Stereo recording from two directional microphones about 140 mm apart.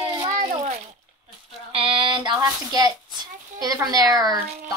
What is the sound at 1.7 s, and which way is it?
Speech, 35° right (ahead or behind).